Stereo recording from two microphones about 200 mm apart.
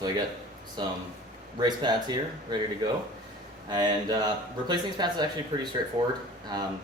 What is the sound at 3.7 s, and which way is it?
Speech, 20° right (ahead or behind).